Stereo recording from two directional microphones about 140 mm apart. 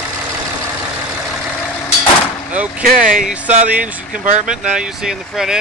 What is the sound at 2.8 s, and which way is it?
Speech, 75° right (ahead or behind).